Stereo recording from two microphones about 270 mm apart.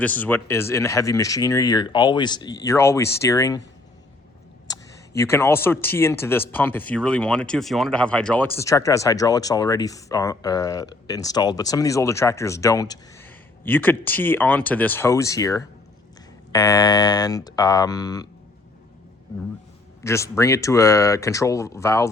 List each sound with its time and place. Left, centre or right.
0.0 s speech: centre
5.1 s speech: centre
20.0 s speech: centre